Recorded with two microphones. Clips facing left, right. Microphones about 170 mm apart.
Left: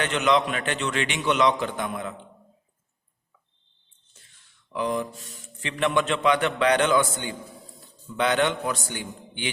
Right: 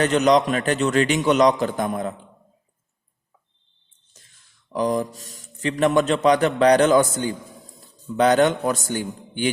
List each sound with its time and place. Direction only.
0.0 s speech: 40° right (ahead or behind)
4.1 s a sound: 40° right (ahead or behind)
4.7 s a man's voice: 40° right (ahead or behind)